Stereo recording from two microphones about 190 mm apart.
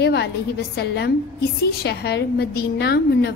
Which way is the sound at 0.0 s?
60° left (ahead or behind).